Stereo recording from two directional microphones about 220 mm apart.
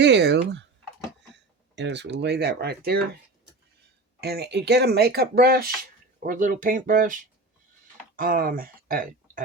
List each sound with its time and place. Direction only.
0.0 s speech: 50° right (ahead or behind)
1.7 s speech: 50° right (ahead or behind)
4.2 s speech: 45° right (ahead or behind)